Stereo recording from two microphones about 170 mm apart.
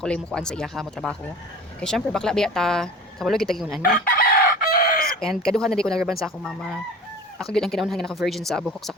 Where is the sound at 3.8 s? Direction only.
55° left (ahead or behind).